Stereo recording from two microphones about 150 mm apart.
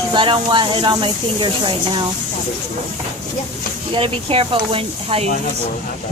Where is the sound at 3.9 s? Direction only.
35° right (ahead or behind).